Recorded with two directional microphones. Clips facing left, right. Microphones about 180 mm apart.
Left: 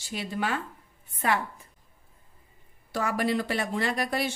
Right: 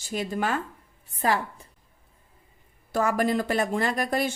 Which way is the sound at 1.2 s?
35° right (ahead or behind).